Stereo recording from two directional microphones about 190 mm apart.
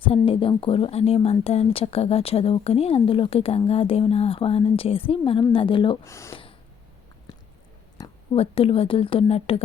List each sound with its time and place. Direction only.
0.3 s a woman's voice: 30° left (ahead or behind)
6.1 s speech: 15° left (ahead or behind)
7.9 s speech: 25° left (ahead or behind)